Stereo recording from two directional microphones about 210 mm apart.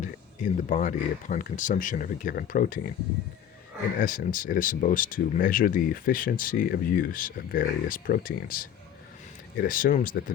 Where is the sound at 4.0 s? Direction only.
40° left (ahead or behind).